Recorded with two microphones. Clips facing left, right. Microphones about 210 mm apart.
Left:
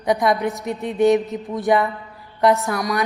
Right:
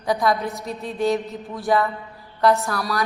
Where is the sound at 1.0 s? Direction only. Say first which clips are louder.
Left 6 dB; 20° left (ahead or behind).